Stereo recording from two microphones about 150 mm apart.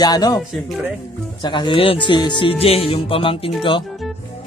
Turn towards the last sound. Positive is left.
turn(degrees=35)  # may be behind; listen again after turning